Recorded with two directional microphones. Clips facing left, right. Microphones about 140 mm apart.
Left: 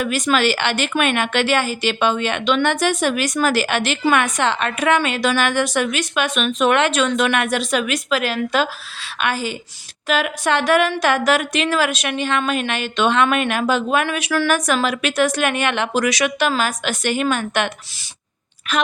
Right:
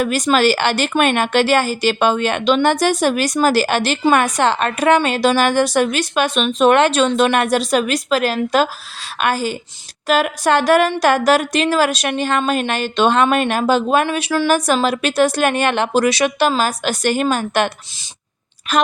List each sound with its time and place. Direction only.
0.0 s a woman's voice: 40° right (ahead or behind)
18.7 s a woman's voice: 40° right (ahead or behind)